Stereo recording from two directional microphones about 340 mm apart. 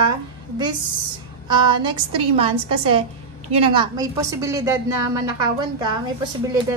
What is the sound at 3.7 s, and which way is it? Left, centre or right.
A woman's voice, centre.